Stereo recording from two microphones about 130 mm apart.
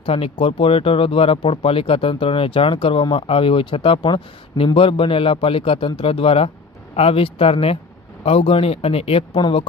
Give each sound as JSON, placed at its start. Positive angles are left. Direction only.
{"t": 0.0, "sound": "speech", "side_deg": 45}